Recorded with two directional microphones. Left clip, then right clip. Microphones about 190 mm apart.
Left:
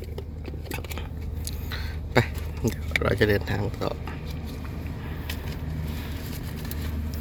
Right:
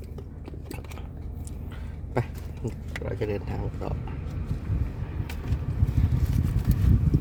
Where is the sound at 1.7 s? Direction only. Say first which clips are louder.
Left 7 dB; centre (ahead or behind).